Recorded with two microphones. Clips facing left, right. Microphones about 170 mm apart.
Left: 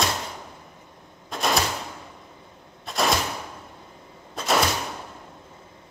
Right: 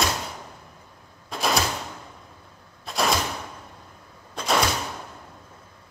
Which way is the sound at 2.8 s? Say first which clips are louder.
Even; centre (ahead or behind).